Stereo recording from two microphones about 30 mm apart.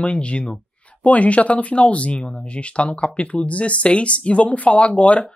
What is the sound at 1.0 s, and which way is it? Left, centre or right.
Speech, left.